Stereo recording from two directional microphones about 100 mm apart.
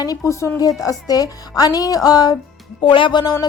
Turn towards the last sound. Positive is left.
turn(degrees=50)  # may be behind; listen again after turning